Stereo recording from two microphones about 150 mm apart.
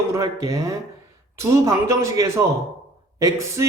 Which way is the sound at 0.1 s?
20° right (ahead or behind).